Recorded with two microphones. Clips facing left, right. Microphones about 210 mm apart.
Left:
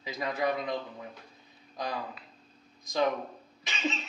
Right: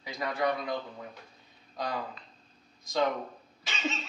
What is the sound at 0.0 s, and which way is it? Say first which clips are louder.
Speech: even; 20° left (ahead or behind).